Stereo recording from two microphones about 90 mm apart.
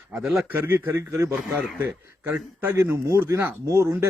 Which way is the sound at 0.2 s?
Centre (ahead or behind).